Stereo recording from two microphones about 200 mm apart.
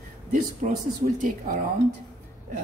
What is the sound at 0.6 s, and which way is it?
Speech, 35° right (ahead or behind).